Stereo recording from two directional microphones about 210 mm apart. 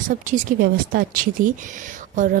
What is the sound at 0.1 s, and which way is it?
Speech, 40° right (ahead or behind).